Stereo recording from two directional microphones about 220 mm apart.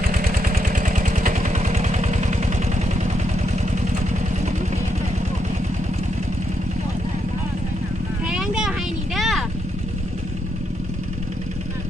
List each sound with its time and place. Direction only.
0.1 s vehicle: 40° right (ahead or behind)
8.3 s vehicle: 5° right (ahead or behind)